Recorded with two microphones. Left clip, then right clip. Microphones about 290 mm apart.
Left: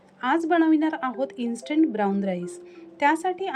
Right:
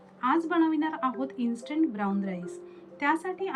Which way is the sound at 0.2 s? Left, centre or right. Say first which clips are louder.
Left 4 dB; centre.